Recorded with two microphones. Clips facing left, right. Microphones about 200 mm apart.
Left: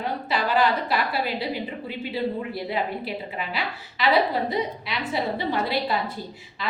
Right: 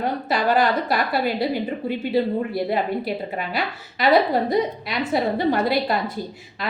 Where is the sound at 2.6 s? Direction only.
45° right (ahead or behind).